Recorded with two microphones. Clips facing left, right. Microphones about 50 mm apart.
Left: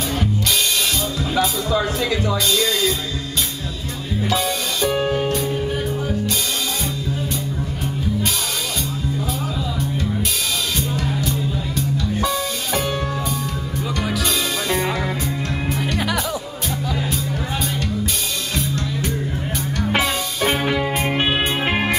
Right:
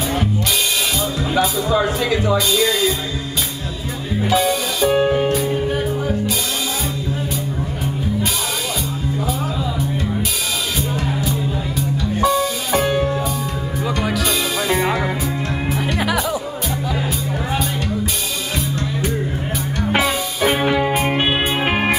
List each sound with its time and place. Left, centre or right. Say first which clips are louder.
1.7 s speech: right 3 dB; centre
4.2 s music: right 4 dB; centre
12.2 s music: right 5 dB; centre
12.8 s music: right 5 dB; centre
13.8 s music: right 3 dB; centre
19.8 s music: right 2 dB; centre
20.6 s music: right 3 dB; centre